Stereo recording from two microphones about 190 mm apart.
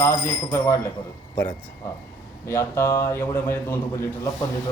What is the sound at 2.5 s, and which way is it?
Speech, 15° left (ahead or behind).